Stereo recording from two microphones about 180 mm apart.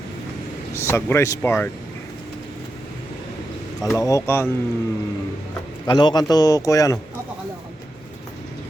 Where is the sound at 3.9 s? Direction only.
15° left (ahead or behind).